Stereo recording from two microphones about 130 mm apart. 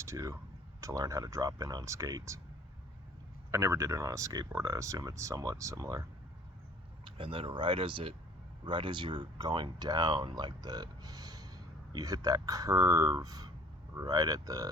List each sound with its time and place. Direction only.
0.0 s speech: 25° right (ahead or behind)
3.5 s speech: 20° right (ahead or behind)
7.0 s speech: 40° right (ahead or behind)